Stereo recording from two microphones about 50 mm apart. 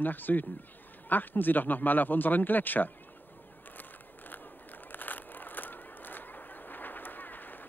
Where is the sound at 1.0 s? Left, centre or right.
Left.